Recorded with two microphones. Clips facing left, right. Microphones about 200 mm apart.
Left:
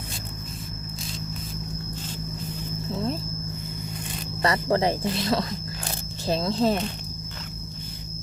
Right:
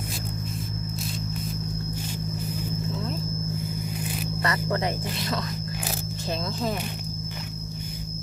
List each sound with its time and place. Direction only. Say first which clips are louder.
4.4 s speech: left 5 dB; 30° left (ahead or behind)